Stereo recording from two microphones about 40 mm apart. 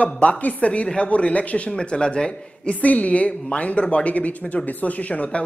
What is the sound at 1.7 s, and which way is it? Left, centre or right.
A woman's voice, left.